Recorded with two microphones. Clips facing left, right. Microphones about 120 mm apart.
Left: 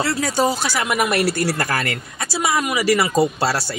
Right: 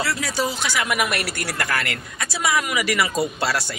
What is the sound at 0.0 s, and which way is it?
Speech, 45° left (ahead or behind).